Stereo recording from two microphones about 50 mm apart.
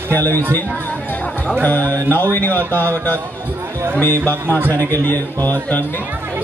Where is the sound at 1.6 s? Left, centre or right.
Left.